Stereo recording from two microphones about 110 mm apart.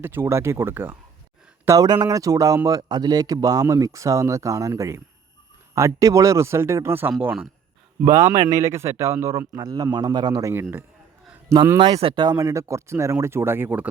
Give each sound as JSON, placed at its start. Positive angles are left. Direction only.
{"t": 0.0, "sound": "speech", "side_deg": -20}
{"t": 1.6, "sound": "speech", "side_deg": -35}
{"t": 8.0, "sound": "speech", "side_deg": -30}
{"t": 9.6, "sound": "speech", "side_deg": -35}
{"t": 10.5, "sound": "speech", "side_deg": -20}
{"t": 11.5, "sound": "speech", "side_deg": -35}
{"t": 11.9, "sound": "speech", "side_deg": -50}